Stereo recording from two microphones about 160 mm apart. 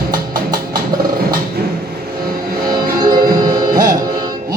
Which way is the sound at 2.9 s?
25° right (ahead or behind).